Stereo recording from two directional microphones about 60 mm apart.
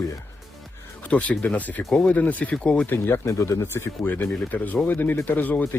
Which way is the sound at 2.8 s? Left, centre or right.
Left.